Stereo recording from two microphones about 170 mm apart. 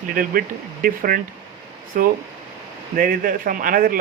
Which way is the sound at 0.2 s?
55° right (ahead or behind).